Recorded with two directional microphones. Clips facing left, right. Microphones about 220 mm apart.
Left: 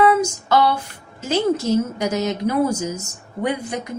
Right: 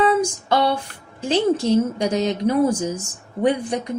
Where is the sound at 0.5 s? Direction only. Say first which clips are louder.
Left 1 dB; 30° right (ahead or behind).